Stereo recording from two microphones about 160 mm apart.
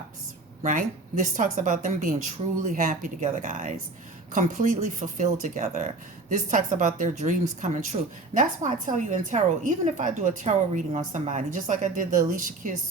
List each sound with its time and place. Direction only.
0.6 s a woman's voice: 55° right (ahead or behind)